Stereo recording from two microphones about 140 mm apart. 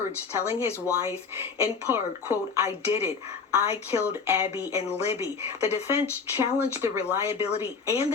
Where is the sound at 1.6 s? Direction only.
15° right (ahead or behind).